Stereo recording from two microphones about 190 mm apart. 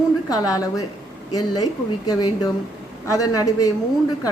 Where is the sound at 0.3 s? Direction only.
20° left (ahead or behind).